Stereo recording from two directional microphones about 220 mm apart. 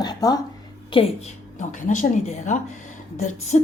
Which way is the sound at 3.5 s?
30° left (ahead or behind).